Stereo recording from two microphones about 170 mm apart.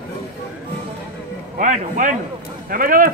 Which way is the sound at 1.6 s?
50° right (ahead or behind).